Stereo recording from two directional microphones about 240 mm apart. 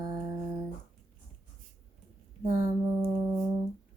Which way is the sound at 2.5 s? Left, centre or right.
Centre.